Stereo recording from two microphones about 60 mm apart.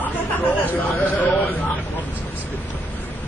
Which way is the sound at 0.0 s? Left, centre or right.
Left.